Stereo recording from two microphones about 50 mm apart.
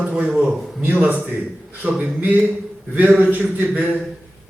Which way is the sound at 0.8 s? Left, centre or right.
Right.